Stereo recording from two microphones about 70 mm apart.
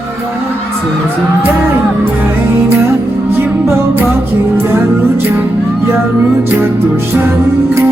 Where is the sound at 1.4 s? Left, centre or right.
Right.